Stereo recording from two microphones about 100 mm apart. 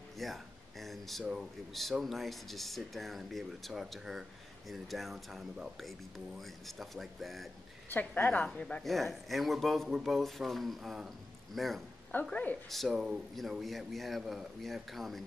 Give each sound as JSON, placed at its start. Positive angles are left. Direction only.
{"t": 0.2, "sound": "speech", "side_deg": 0}
{"t": 7.9, "sound": "a woman's voice", "side_deg": 15}
{"t": 12.1, "sound": "a woman's voice", "side_deg": 15}
{"t": 12.6, "sound": "speech", "side_deg": 0}